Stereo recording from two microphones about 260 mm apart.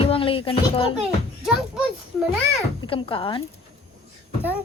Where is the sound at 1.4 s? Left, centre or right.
Centre.